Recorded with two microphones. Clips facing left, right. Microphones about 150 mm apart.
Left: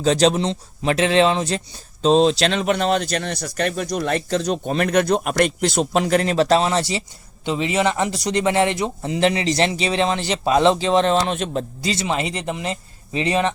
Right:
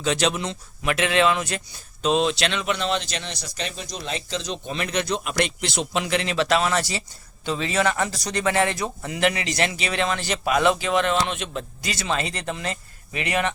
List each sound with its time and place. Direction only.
0.0 s speech: 35° left (ahead or behind)